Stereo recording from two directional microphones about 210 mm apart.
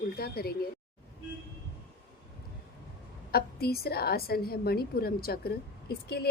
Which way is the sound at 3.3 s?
50° left (ahead or behind).